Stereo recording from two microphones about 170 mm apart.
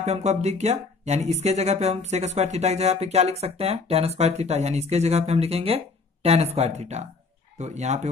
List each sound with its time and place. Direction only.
0.0 s speech: 40° right (ahead or behind)